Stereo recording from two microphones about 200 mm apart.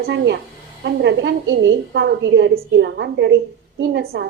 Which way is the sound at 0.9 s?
65° right (ahead or behind).